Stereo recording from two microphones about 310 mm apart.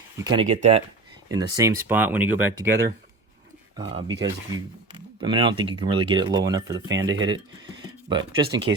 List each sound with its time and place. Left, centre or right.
0.3 s speech: right
1.3 s speech: centre
3.8 s speech: centre
7.3 s a sound: centre
8.2 s speech: right